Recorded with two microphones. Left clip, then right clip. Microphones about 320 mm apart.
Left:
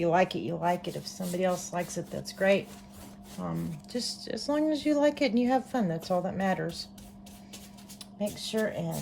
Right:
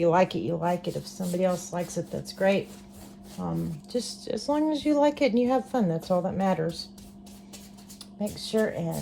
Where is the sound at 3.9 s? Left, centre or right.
Centre.